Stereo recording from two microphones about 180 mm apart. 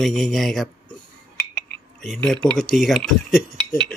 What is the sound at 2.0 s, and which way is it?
Speech, centre (ahead or behind).